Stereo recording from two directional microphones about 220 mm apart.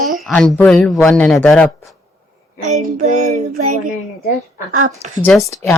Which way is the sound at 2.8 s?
35° right (ahead or behind).